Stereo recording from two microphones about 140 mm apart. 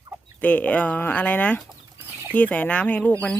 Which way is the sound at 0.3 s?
10° left (ahead or behind).